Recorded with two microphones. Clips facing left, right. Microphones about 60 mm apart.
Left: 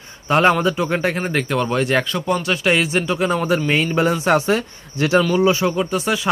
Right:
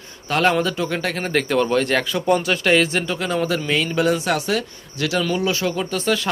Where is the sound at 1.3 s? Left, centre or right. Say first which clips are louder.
Right 1 dB; centre.